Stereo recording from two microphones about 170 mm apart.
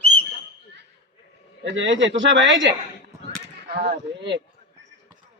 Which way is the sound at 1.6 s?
90° right.